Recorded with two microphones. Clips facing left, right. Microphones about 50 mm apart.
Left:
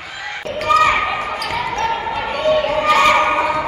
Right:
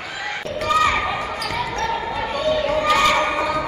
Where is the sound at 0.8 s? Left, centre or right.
Left.